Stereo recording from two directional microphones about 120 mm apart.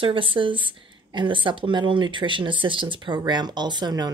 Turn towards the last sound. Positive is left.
turn(degrees=-35)  # may be behind; listen again after turning